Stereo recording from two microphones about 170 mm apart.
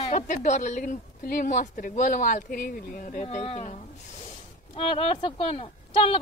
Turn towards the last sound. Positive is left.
turn(degrees=30)  # may be behind; listen again after turning